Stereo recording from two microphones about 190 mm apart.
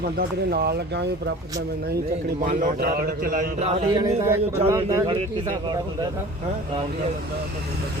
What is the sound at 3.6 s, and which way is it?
Speech, 25° right (ahead or behind).